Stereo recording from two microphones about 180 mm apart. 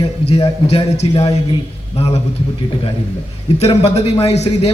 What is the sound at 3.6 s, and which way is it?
A man's voice, 35° left (ahead or behind).